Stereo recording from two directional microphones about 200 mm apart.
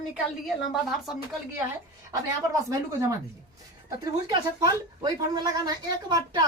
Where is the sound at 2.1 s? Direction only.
15° right (ahead or behind).